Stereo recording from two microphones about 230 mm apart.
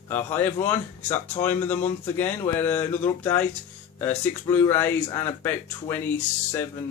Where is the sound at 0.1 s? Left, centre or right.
Centre.